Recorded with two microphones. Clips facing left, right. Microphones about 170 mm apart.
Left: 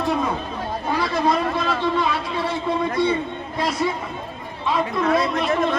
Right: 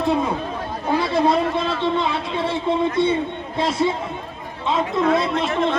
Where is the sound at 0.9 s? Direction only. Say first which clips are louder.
Right 3 dB; 25° right (ahead or behind).